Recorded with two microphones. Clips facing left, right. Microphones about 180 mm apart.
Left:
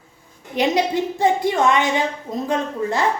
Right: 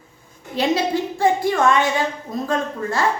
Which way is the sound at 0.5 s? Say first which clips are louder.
Left 1 dB; 20° left (ahead or behind).